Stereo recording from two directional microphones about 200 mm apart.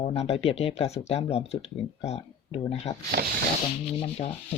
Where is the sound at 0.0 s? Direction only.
30° left (ahead or behind).